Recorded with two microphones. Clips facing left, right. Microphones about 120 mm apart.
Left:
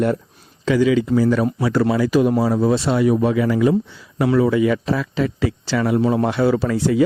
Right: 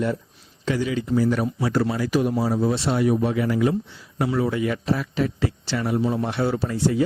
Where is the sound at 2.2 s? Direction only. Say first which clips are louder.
Left 5 dB; 90° left.